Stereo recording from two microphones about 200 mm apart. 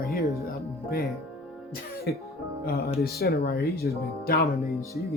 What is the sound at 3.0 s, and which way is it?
Speech, 50° left (ahead or behind).